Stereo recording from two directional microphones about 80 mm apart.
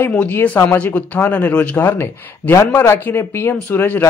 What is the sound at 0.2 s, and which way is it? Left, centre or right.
Speech, left.